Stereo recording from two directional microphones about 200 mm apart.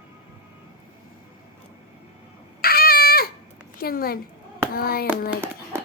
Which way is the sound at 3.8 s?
50° left (ahead or behind).